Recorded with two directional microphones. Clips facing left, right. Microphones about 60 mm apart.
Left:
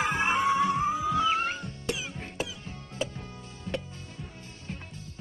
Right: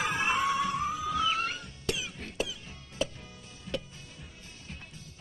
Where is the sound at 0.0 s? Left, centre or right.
Left.